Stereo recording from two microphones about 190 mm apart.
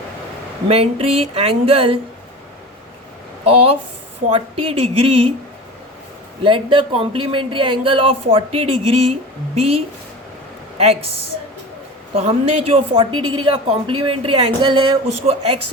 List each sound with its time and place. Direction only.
0.7 s speech: 30° right (ahead or behind)
3.4 s speech: 30° right (ahead or behind)
6.4 s speech: 25° right (ahead or behind)
12.1 s speech: 30° right (ahead or behind)
13.1 s a woman's voice: 90° right
13.4 s speech: 25° right (ahead or behind)